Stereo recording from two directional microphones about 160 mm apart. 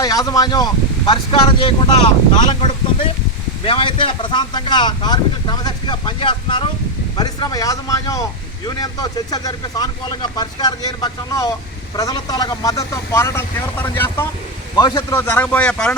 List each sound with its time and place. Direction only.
0.0 s a man's voice: 20° left (ahead or behind); by 16.0 s 5° left (ahead or behind)